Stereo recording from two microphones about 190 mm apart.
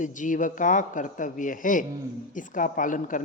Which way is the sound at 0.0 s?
40° left (ahead or behind).